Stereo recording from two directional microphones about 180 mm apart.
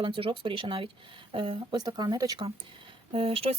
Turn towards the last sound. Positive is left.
turn(degrees=-30)  # may be behind; listen again after turning